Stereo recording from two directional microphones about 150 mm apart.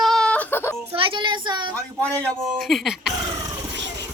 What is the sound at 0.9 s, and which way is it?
Speech, 35° right (ahead or behind).